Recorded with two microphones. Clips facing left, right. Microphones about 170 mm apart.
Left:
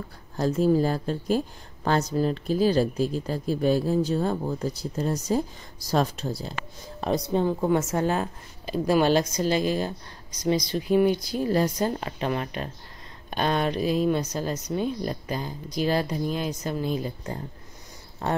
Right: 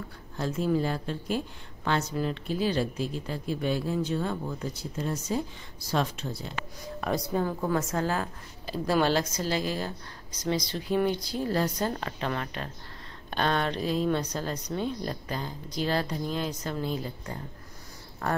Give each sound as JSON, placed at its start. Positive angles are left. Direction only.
{"t": 0.4, "sound": "speech", "side_deg": 40}
{"t": 7.0, "sound": "a woman's voice", "side_deg": 25}